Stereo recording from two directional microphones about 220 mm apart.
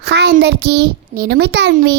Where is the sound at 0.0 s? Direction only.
50° right (ahead or behind).